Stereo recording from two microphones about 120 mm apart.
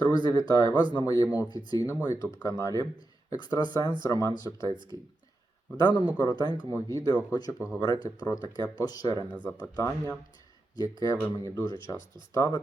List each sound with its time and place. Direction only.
0.0 s speech: 35° left (ahead or behind)